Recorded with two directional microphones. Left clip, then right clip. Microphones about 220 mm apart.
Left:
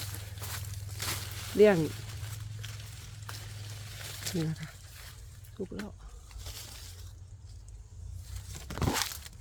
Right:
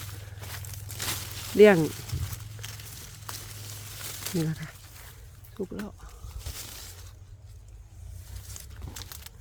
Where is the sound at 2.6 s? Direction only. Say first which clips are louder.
Right 5 dB; 50° right (ahead or behind).